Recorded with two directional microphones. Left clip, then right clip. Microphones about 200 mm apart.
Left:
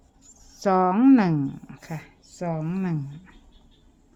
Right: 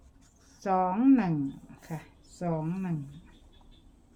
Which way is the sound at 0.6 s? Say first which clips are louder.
Left 7 dB; 55° left (ahead or behind).